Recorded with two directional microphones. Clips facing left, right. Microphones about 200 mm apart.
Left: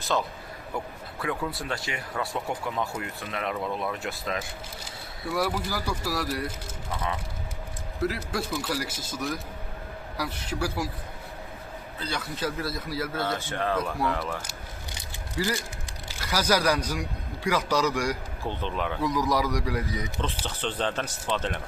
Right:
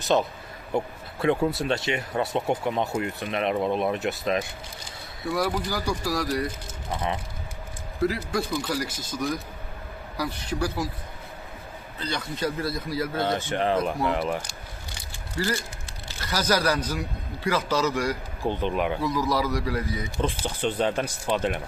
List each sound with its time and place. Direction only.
0.1 s speech: 20° right (ahead or behind)
5.3 s speech: 5° left (ahead or behind)
8.0 s speech: 5° left (ahead or behind)
11.9 s speech: 5° left (ahead or behind)
13.1 s speech: 20° right (ahead or behind)
15.4 s speech: 15° left (ahead or behind)
18.4 s speech: 15° right (ahead or behind)
19.0 s speech: 15° left (ahead or behind)
20.4 s speech: 10° right (ahead or behind)